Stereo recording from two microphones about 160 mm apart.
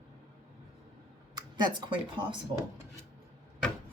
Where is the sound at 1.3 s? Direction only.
25° right (ahead or behind).